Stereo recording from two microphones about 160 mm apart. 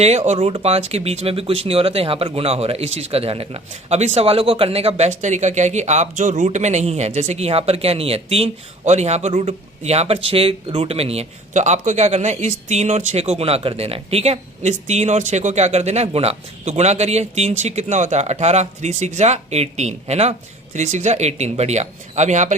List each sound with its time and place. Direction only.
0.0 s speech: 45° right (ahead or behind)